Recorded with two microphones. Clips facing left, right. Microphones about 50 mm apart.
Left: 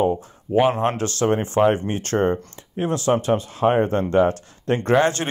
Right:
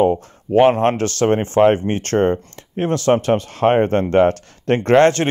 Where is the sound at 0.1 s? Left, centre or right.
Right.